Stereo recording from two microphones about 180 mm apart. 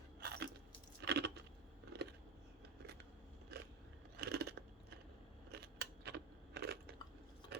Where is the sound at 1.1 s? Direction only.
70° right (ahead or behind).